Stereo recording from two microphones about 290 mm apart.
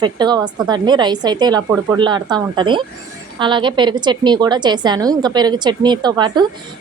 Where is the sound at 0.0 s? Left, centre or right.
Centre.